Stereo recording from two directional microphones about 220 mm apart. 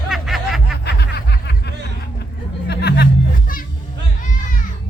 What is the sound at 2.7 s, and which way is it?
Music, 50° left (ahead or behind).